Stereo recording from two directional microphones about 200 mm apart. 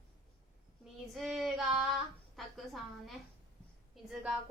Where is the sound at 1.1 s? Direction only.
Centre (ahead or behind).